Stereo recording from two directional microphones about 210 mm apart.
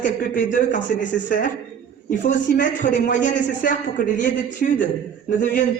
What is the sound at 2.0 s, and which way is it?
A man's voice, 40° left (ahead or behind).